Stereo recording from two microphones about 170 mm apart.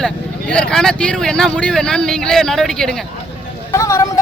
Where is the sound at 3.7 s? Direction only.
20° left (ahead or behind).